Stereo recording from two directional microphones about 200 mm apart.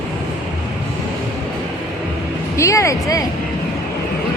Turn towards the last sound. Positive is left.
turn(degrees=15)  # may be behind; listen again after turning